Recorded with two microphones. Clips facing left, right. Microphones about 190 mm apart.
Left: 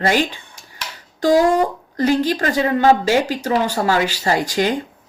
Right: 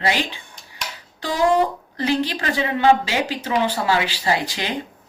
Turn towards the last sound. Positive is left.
turn(degrees=45)  # may be behind; listen again after turning